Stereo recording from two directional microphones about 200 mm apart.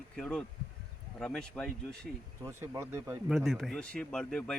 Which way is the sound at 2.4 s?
15° right (ahead or behind).